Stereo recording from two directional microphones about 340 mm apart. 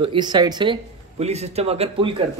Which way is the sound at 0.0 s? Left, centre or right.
Centre.